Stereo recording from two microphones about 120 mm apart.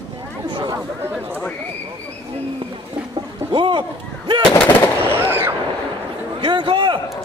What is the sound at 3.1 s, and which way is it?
Artillery fire, 45° right (ahead or behind).